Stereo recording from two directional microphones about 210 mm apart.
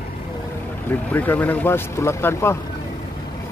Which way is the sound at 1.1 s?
10° left (ahead or behind).